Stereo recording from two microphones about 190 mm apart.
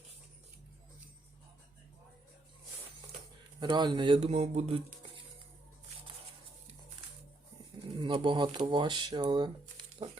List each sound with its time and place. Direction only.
3.6 s speech: 20° right (ahead or behind)
8.0 s speech: 25° right (ahead or behind)